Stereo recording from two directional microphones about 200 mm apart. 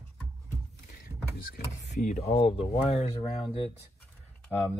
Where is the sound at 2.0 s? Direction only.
35° left (ahead or behind).